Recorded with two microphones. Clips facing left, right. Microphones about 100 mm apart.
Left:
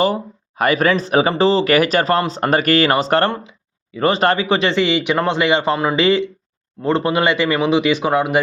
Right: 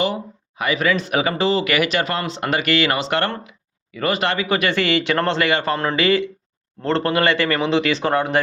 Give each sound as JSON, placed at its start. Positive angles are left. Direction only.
{"t": 0.0, "sound": "speech", "side_deg": 45}
{"t": 3.2, "sound": "a man's voice", "side_deg": 20}
{"t": 6.0, "sound": "a man's voice", "side_deg": 25}